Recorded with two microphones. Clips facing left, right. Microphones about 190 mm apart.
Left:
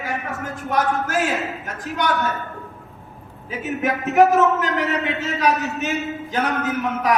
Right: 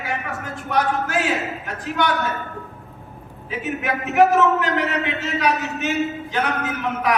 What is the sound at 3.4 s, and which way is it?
A man's voice, 40° left (ahead or behind).